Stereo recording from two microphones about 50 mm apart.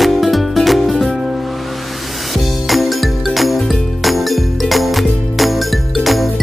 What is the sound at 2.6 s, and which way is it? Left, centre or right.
Music, centre.